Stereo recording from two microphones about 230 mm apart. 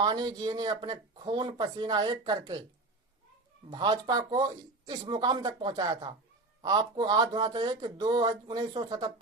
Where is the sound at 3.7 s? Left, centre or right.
Centre.